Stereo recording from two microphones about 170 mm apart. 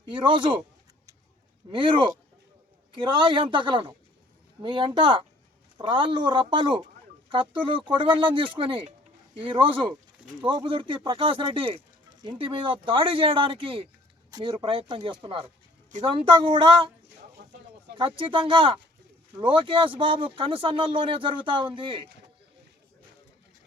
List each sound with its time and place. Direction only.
0.1 s speech: 30° right (ahead or behind)
1.7 s speech: 30° right (ahead or behind)
17.9 s speech: 30° right (ahead or behind)